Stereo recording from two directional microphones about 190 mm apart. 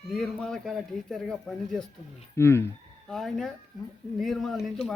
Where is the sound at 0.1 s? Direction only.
5° left (ahead or behind).